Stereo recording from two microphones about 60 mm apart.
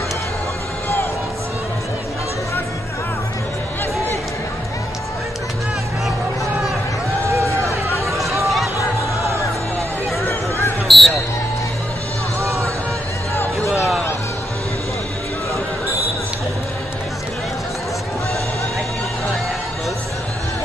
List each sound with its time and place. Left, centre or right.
7.3 s run: right
10.9 s basketball bounce: centre
12.4 s music: right
13.7 s a sound: centre